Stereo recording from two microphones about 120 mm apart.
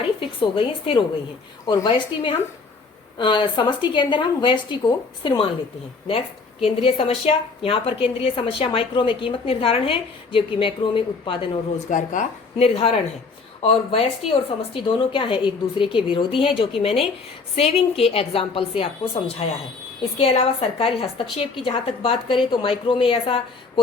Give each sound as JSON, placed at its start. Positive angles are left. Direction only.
{"t": 0.2, "sound": "a woman's voice", "side_deg": 45}
{"t": 6.6, "sound": "a woman's voice", "side_deg": 50}
{"t": 11.9, "sound": "a woman's voice", "side_deg": 90}
{"t": 17.6, "sound": "a woman's voice", "side_deg": 60}